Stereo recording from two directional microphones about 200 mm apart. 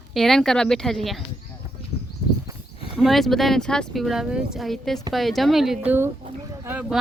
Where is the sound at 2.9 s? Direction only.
Centre (ahead or behind).